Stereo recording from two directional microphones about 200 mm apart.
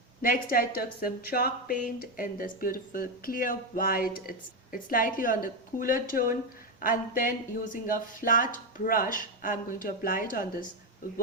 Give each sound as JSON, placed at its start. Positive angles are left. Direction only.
{"t": 0.2, "sound": "speech", "side_deg": 45}